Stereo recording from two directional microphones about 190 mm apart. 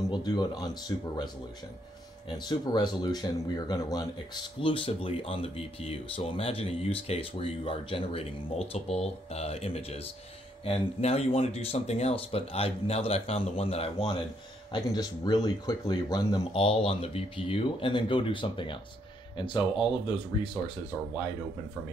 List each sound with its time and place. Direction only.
0.1 s speech: 20° left (ahead or behind)
2.3 s speech: 20° left (ahead or behind)
16.5 s speech: 30° left (ahead or behind)